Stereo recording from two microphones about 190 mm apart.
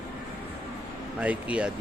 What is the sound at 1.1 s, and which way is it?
Speech, 5° right (ahead or behind).